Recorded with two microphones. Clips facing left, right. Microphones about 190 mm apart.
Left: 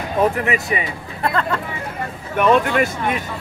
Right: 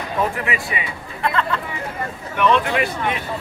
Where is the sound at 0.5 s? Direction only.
40° left (ahead or behind).